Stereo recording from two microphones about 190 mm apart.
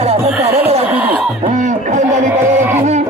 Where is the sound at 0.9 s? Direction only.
10° right (ahead or behind).